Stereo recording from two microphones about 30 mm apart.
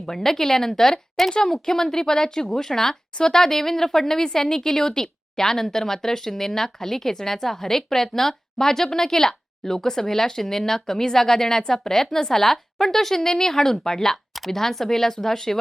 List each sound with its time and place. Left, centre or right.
0.0 s speech: centre
14.3 s speech: centre